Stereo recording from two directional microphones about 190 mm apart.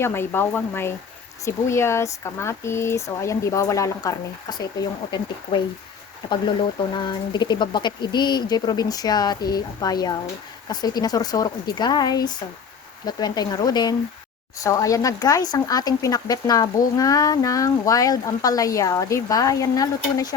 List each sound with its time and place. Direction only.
0.0 s speech: 10° left (ahead or behind)
6.2 s speech: 25° left (ahead or behind)